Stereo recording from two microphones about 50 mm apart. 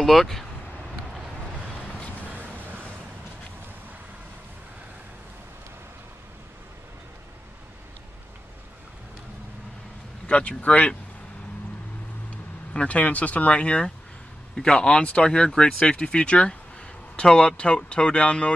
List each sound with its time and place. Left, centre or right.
0.0 s speech: centre
2.2 s a sound: right
10.2 s vehicle: left
10.6 s speech: left
12.7 s speech: left